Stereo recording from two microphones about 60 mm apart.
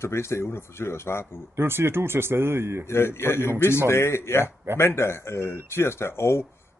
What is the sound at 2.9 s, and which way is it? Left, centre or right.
Speech, left.